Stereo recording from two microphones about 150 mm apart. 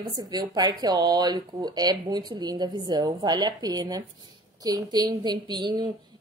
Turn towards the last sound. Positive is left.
turn(degrees=-30)  # may be behind; listen again after turning